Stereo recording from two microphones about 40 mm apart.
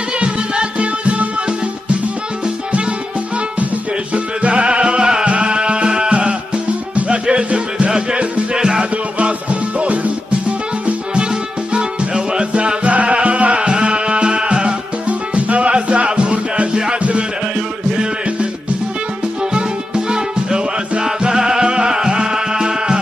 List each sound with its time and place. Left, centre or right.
0.2 s music: right
2.4 s music: right
4.1 s music: right
8.9 s music: right
19.5 s music: right